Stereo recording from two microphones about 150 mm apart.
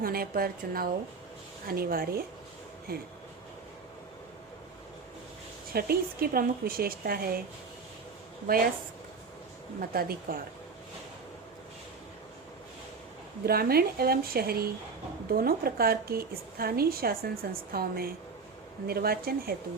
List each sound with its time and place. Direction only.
0.0 s a woman's voice: 80° right
5.7 s speech: 85° right
8.4 s speech: 80° right
9.9 s speech: 85° right
13.4 s a woman's voice: 90° right